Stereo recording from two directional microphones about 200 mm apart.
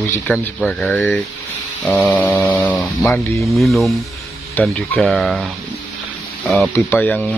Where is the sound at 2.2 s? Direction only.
5° left (ahead or behind).